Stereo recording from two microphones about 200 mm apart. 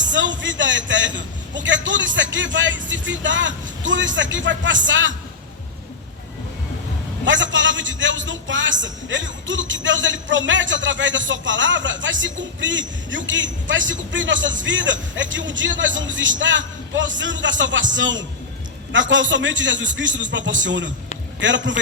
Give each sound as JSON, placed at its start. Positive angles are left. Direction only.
{"t": 0.0, "sound": "a man's voice", "side_deg": -65}
{"t": 7.3, "sound": "a man's voice", "side_deg": -65}